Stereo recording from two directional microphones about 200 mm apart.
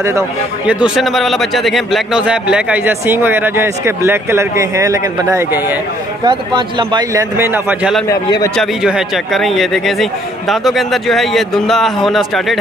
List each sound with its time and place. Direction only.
0.7 s a man's voice: 5° right (ahead or behind)
6.2 s a man's voice: 20° right (ahead or behind)
8.1 s a man's voice: 15° left (ahead or behind)
8.5 s speech: 5° right (ahead or behind)